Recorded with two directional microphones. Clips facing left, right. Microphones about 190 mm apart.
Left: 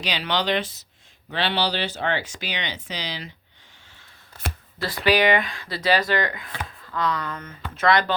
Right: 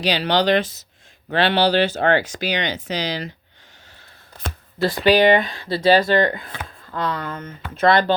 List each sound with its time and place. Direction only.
0.0 s speech: 35° right (ahead or behind)
4.8 s speech: 25° right (ahead or behind)